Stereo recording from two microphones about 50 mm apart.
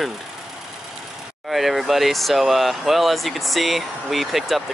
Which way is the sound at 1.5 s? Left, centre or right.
Centre.